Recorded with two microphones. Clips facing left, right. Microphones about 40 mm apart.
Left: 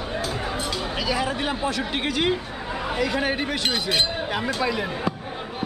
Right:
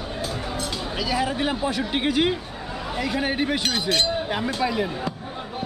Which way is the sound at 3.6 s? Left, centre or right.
Centre.